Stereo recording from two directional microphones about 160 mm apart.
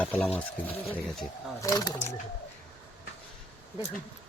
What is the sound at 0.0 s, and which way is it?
Speech, 10° left (ahead or behind).